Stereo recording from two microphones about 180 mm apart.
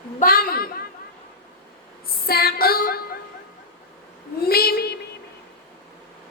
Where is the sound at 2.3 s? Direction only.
60° left (ahead or behind).